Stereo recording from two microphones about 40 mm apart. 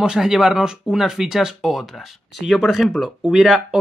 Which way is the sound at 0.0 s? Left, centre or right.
Centre.